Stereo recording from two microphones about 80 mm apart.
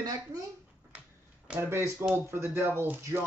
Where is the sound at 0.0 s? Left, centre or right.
Right.